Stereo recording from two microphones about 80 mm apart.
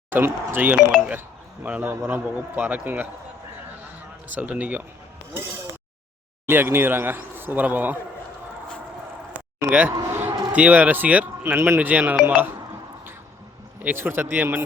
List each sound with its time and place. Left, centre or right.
0.1 s speech: right
0.8 s speech: centre
1.8 s speech: right
4.4 s speech: centre
6.5 s speech: right
9.6 s speech: centre
10.1 s a sound: right
10.6 s speech: centre
13.8 s speech: right